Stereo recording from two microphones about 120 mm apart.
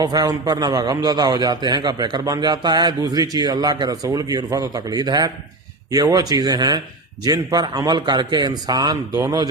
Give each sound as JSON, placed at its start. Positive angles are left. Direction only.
{"t": 0.0, "sound": "a man's voice", "side_deg": -35}